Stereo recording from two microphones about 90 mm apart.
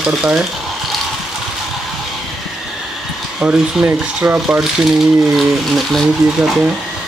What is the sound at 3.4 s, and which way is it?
Speech, 15° right (ahead or behind).